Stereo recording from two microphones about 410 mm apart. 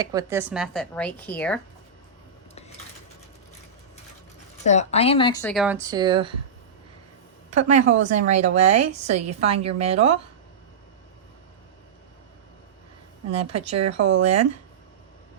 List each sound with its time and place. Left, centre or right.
0.0 s speech: centre
4.6 s speech: centre
7.5 s speech: centre
13.3 s speech: centre